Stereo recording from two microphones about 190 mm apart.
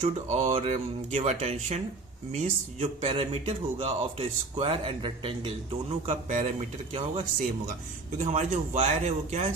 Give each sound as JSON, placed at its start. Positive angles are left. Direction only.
{"t": 0.0, "sound": "speech", "side_deg": -35}
{"t": 6.1, "sound": "speech", "side_deg": -40}